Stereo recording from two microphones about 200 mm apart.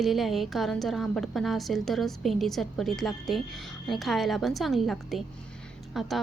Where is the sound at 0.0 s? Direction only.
Centre (ahead or behind).